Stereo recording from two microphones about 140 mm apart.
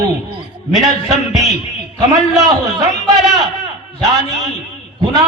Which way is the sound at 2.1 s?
25° right (ahead or behind).